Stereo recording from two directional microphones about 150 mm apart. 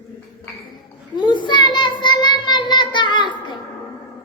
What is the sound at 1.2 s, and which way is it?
Child singing, 30° left (ahead or behind).